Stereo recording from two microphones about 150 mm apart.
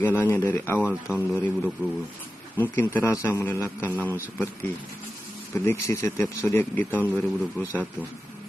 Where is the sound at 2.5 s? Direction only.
15° left (ahead or behind).